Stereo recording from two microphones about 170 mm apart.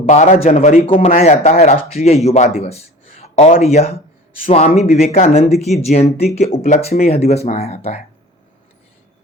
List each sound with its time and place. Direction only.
0.0 s speech: 40° left (ahead or behind)